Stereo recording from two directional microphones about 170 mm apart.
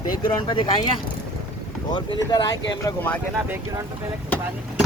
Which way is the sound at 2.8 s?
10° left (ahead or behind).